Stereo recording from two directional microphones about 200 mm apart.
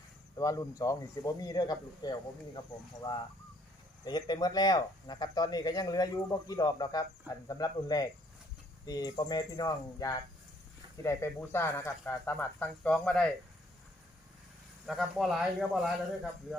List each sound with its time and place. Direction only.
0.3 s speech: 15° left (ahead or behind)
14.8 s speech: centre (ahead or behind)